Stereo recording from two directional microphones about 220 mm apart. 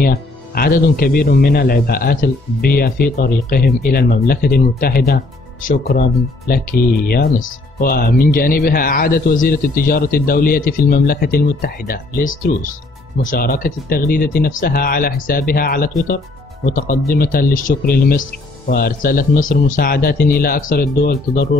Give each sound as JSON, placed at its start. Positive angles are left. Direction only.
{"t": 0.0, "sound": "speech", "side_deg": 40}